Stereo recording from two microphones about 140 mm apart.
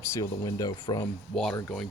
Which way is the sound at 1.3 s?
Centre (ahead or behind).